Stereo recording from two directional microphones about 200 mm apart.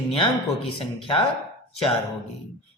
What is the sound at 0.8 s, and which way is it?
Speech, 25° left (ahead or behind).